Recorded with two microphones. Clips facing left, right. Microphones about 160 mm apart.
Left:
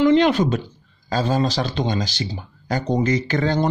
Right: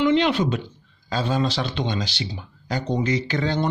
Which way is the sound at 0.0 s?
45° left (ahead or behind).